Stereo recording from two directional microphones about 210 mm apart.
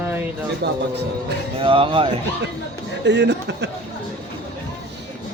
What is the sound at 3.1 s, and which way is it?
Speech, 55° right (ahead or behind).